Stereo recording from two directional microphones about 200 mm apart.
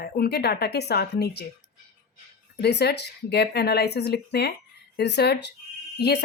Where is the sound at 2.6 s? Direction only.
55° left (ahead or behind).